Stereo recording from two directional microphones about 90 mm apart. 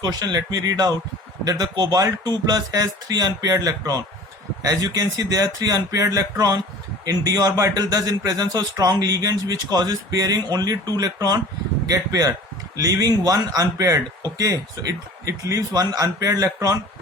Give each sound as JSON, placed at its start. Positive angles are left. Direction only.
{"t": 0.0, "sound": "speech", "side_deg": -45}